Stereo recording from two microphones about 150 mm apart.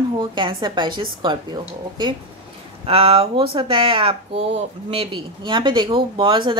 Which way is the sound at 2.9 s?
40° right (ahead or behind).